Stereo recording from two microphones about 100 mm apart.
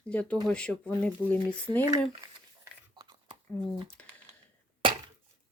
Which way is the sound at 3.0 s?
45° right (ahead or behind).